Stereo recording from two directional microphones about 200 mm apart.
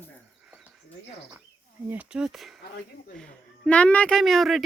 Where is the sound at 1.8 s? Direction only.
10° right (ahead or behind).